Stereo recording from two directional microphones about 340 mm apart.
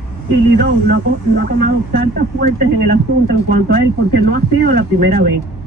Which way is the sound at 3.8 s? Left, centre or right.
Left.